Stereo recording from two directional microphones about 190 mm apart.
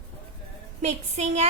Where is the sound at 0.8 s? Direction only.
35° right (ahead or behind).